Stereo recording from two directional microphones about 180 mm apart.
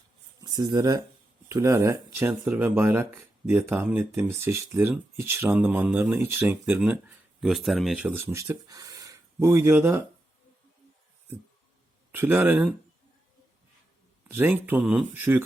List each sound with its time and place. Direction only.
0.3 s speech: 20° right (ahead or behind)
12.1 s speech: 10° right (ahead or behind)
14.3 s speech: 10° right (ahead or behind)